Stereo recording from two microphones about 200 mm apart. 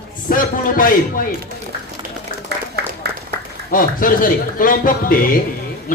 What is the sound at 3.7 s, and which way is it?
Speech, 45° left (ahead or behind).